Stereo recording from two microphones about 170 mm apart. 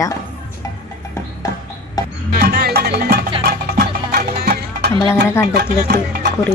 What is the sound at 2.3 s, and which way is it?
Music, 65° right (ahead or behind).